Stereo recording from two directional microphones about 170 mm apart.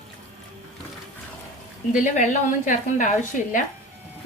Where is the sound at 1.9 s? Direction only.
45° left (ahead or behind).